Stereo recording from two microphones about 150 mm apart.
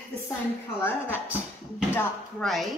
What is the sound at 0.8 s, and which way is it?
A man's voice, 15° left (ahead or behind).